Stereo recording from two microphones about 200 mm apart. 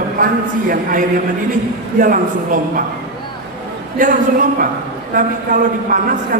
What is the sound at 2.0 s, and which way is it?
Speech, 45° right (ahead or behind).